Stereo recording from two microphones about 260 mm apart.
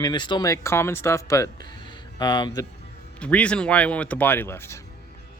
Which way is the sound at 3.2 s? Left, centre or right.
Centre.